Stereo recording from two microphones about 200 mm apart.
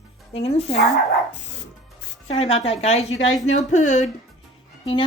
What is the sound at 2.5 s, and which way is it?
Speech, 30° left (ahead or behind).